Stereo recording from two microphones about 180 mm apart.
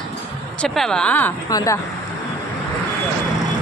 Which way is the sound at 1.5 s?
20° left (ahead or behind).